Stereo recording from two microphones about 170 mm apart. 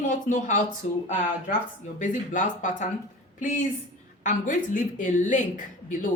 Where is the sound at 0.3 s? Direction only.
45° left (ahead or behind).